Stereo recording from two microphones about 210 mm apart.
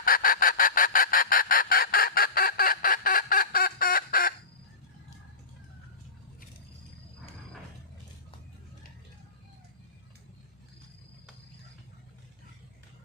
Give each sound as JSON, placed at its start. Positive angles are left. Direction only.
{"t": 0.0, "sound": "fowl", "side_deg": 40}